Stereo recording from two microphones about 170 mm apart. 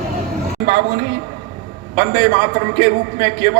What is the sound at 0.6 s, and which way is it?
A man's voice, 65° right (ahead or behind).